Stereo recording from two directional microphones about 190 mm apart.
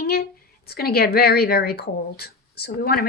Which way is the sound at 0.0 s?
55° left (ahead or behind).